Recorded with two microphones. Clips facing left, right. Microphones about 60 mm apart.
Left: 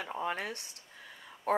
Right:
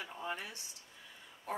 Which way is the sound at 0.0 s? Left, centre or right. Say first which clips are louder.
Left 6 dB; left.